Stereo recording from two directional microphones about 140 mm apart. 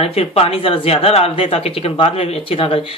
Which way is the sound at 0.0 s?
45° left (ahead or behind).